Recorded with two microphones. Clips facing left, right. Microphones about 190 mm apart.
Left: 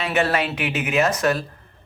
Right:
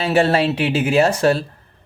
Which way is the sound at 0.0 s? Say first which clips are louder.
Right 5 dB; 30° right (ahead or behind).